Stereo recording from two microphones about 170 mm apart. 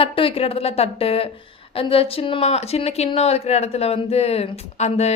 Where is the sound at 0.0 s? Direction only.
30° left (ahead or behind).